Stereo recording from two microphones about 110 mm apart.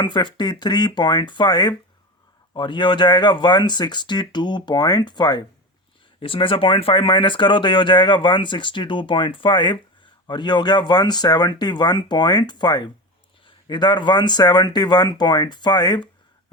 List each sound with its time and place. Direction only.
0.0 s speech: 45° left (ahead or behind)
6.1 s speech: 55° left (ahead or behind)